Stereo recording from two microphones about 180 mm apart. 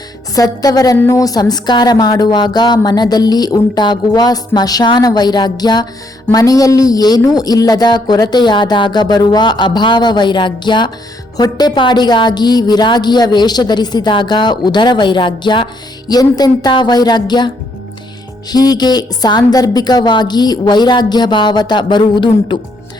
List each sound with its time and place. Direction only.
0.3 s a woman's voice: 20° left (ahead or behind)
18.5 s a woman's voice: 20° left (ahead or behind)